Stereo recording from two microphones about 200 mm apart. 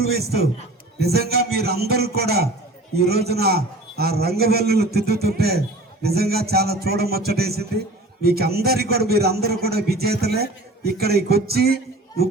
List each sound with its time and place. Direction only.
0.0 s a man's voice: 50° right (ahead or behind)